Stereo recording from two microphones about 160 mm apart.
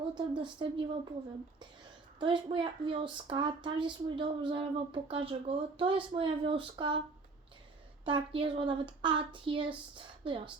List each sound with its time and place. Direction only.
0.3 s a woman's voice: 30° right (ahead or behind)
2.1 s speech: 30° right (ahead or behind)
8.0 s speech: 35° right (ahead or behind)